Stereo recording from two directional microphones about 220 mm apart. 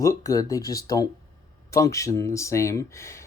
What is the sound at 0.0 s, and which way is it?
Speech, 15° left (ahead or behind).